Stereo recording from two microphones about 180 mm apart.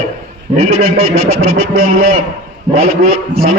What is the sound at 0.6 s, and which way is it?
Speech, 35° right (ahead or behind).